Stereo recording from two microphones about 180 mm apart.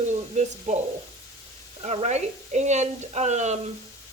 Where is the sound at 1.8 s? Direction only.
35° right (ahead or behind).